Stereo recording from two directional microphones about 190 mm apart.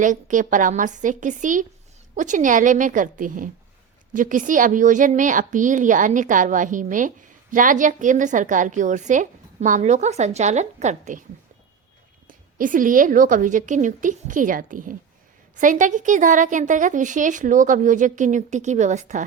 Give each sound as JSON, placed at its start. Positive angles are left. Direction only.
{"t": 0.0, "sound": "a woman's voice", "side_deg": -40}
{"t": 12.3, "sound": "a woman's voice", "side_deg": -45}